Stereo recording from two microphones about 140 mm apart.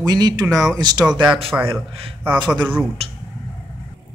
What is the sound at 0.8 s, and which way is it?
Speech, 30° right (ahead or behind).